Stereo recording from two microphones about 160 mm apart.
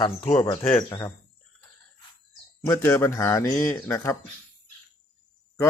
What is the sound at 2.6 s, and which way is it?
Speech, 15° left (ahead or behind).